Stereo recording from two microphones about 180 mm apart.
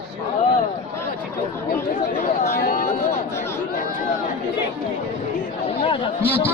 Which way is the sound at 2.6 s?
50° left (ahead or behind).